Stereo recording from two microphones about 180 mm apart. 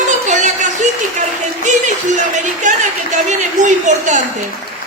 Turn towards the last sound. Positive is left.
turn(degrees=-45)  # may be behind; listen again after turning